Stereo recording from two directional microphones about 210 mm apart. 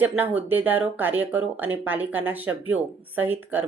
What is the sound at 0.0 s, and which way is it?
Speech, 10° right (ahead or behind).